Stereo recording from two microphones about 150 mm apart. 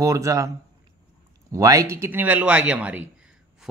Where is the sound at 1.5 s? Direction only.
20° right (ahead or behind).